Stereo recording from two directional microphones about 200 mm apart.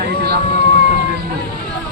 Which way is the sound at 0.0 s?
50° right (ahead or behind).